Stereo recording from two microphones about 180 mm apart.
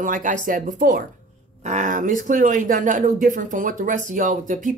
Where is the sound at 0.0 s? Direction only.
45° right (ahead or behind).